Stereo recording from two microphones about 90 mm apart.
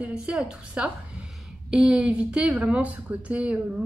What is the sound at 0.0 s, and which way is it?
A woman's voice, 15° right (ahead or behind).